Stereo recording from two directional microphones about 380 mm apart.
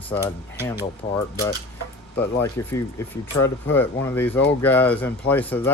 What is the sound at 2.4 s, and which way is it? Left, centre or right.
Speech, centre.